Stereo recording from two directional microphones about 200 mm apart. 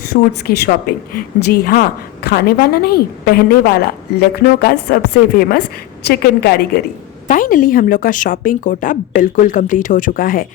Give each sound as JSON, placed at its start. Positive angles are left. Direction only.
{"t": 0.0, "sound": "a woman's voice", "side_deg": 50}